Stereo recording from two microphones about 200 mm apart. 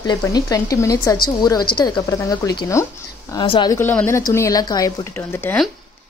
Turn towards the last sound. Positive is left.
turn(degrees=10)  # may be behind; listen again after turning